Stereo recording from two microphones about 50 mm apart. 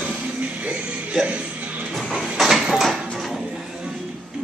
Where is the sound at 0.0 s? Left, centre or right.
Right.